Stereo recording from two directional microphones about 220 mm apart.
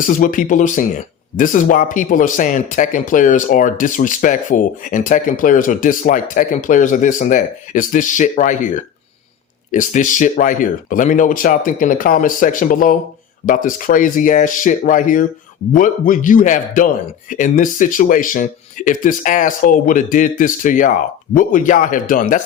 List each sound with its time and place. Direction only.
0.0 s speech: 35° left (ahead or behind)